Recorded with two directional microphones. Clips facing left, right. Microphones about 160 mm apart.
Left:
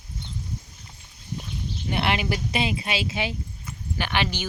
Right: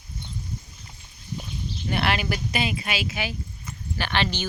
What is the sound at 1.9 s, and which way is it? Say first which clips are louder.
Speech: even; 20° left (ahead or behind).